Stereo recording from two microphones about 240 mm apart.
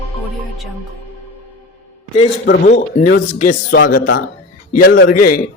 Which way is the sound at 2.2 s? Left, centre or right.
Left.